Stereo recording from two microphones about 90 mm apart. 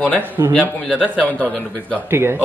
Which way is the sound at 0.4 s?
35° right (ahead or behind).